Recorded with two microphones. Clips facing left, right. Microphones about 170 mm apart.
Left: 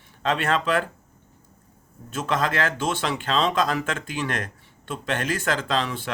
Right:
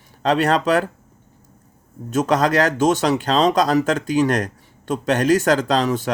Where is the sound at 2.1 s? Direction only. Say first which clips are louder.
Right 8 dB; 45° right (ahead or behind).